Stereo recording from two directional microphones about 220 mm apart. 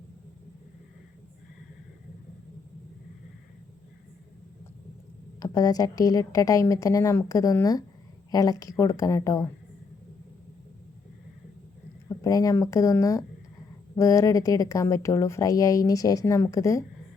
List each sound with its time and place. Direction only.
5.4 s speech: 15° left (ahead or behind)
12.0 s speech: 15° left (ahead or behind)